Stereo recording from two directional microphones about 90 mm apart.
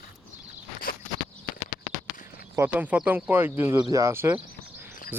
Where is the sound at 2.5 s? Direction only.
20° right (ahead or behind).